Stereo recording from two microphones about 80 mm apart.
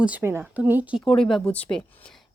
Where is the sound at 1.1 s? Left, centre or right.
Centre.